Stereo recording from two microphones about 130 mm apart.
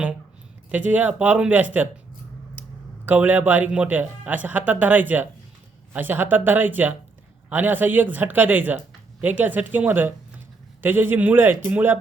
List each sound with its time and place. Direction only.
0.9 s speech: 15° right (ahead or behind)
3.1 s speech: 15° right (ahead or behind)